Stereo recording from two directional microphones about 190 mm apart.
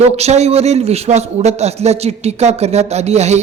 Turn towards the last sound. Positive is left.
turn(degrees=-35)  # may be behind; listen again after turning